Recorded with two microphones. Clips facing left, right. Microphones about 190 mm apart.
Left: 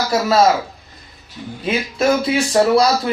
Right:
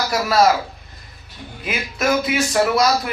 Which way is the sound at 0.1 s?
25° left (ahead or behind).